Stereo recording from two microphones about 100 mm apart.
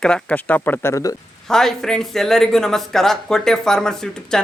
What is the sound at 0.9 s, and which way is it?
Speech, 35° left (ahead or behind).